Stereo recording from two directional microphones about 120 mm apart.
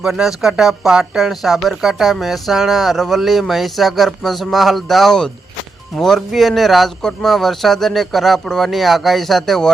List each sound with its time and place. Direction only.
0.0 s speech: 5° right (ahead or behind)